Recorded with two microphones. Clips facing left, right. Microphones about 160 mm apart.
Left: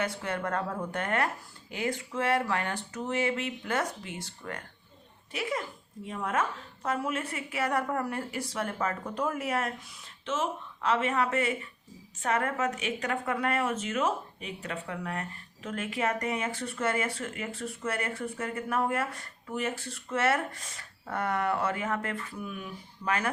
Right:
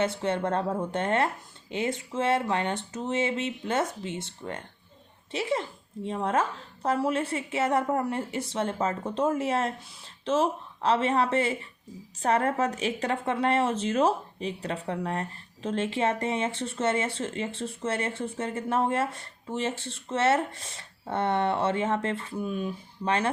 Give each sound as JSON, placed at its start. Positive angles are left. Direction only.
{"t": 0.0, "sound": "a woman's voice", "side_deg": -25}